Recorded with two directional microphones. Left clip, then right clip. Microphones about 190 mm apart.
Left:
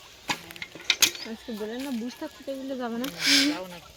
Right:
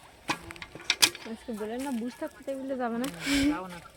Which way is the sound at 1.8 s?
40° left (ahead or behind).